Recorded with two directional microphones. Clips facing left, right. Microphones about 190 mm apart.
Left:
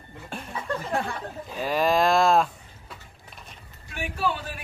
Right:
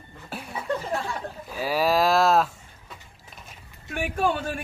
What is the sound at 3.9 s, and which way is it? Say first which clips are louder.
Speech: right 4 dB; 50° right (ahead or behind).